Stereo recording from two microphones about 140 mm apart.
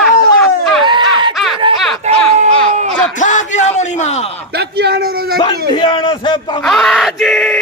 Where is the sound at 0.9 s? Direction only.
35° right (ahead or behind).